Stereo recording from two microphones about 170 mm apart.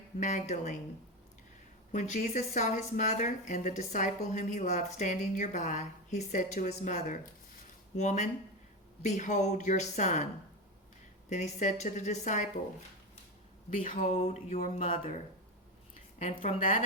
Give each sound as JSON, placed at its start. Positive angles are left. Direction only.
{"t": 0.2, "sound": "speech", "side_deg": 45}
{"t": 1.9, "sound": "speech", "side_deg": 45}
{"t": 11.3, "sound": "speech", "side_deg": 45}
{"t": 13.7, "sound": "speech", "side_deg": 50}
{"t": 14.9, "sound": "speech", "side_deg": 50}
{"t": 16.4, "sound": "speech", "side_deg": 35}